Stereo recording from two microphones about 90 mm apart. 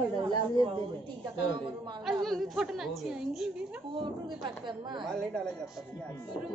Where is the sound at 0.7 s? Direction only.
65° right (ahead or behind).